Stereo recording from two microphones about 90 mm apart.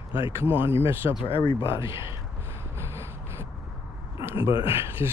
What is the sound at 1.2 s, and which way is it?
Speech, 80° left.